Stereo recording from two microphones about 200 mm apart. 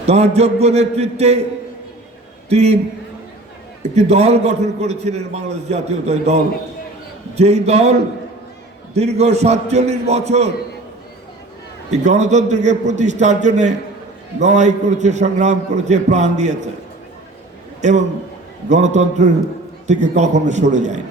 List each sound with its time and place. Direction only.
0.0 s a man's voice: 35° right (ahead or behind)
2.5 s a man's voice: 35° right (ahead or behind)
3.8 s a man's voice: 35° right (ahead or behind)
11.9 s a man's voice: 35° right (ahead or behind)
17.7 s a man's voice: 35° right (ahead or behind)